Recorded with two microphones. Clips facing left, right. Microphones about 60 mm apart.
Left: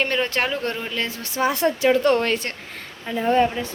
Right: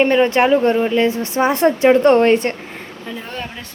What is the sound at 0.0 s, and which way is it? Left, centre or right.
Speech, right.